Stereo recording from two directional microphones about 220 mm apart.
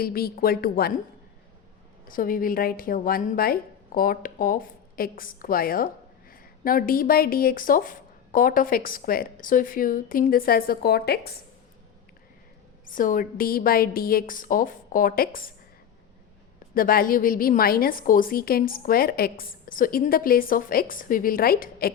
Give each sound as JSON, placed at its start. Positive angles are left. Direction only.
{"t": 0.0, "sound": "a woman's voice", "side_deg": 45}
{"t": 2.0, "sound": "a woman's voice", "side_deg": 40}
{"t": 12.8, "sound": "a woman's voice", "side_deg": 40}
{"t": 16.7, "sound": "a woman's voice", "side_deg": 40}